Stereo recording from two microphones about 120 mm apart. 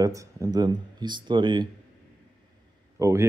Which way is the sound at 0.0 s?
30° right (ahead or behind).